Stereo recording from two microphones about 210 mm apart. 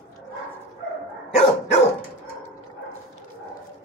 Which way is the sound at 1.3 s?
30° left (ahead or behind).